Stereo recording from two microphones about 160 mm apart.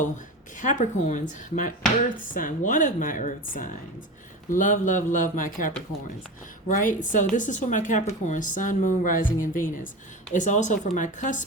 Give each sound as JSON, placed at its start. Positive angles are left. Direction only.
{"t": 0.6, "sound": "speech", "side_deg": 50}